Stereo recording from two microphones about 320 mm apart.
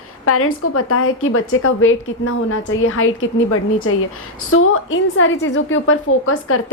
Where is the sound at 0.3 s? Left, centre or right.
Left.